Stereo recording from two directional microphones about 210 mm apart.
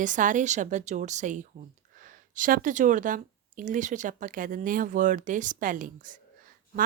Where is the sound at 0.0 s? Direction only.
40° right (ahead or behind).